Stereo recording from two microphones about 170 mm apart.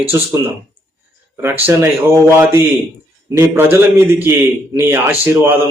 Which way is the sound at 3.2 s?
15° right (ahead or behind).